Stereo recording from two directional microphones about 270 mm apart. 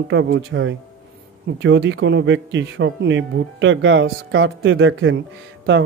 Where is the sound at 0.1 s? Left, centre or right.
Right.